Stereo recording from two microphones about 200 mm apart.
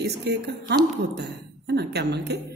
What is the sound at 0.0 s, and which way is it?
A woman's voice, 55° right (ahead or behind).